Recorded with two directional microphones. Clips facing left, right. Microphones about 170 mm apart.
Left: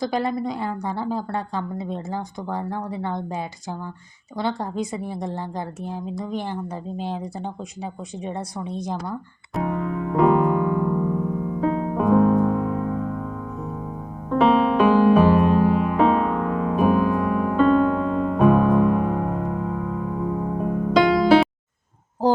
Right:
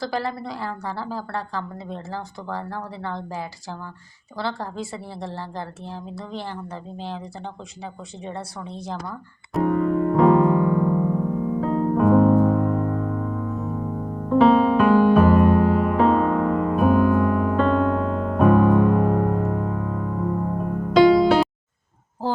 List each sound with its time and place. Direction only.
0.0 s a woman's voice: 20° left (ahead or behind)
8.2 s a woman's voice: 15° left (ahead or behind)
9.6 s electric piano: centre (ahead or behind)
11.6 s music: centre (ahead or behind)